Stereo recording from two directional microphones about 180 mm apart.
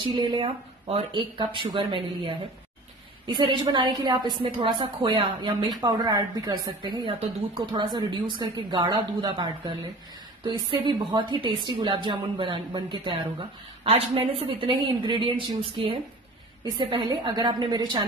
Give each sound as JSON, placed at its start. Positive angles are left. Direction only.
{"t": 0.0, "sound": "a woman's voice", "side_deg": -25}
{"t": 13.8, "sound": "a woman's voice", "side_deg": -35}